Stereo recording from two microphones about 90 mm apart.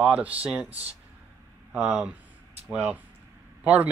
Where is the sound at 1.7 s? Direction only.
10° right (ahead or behind).